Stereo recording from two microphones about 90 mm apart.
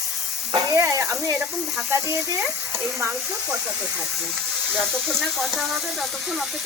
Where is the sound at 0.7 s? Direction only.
35° right (ahead or behind).